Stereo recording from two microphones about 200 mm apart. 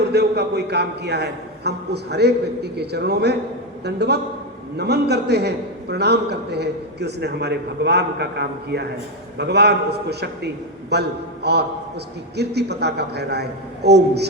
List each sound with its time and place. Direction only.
0.1 s a man's voice: 55° right (ahead or behind)
12.4 s a man's voice: 55° right (ahead or behind)